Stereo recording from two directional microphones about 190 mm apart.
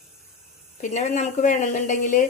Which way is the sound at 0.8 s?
40° left (ahead or behind).